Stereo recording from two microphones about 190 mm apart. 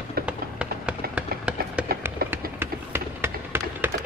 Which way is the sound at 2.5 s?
10° right (ahead or behind).